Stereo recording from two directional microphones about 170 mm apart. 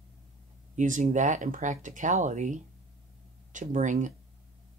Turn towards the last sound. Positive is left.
turn(degrees=-45)  # may be behind; listen again after turning